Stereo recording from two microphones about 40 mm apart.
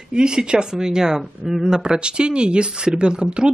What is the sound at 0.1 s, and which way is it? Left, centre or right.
Speech, centre.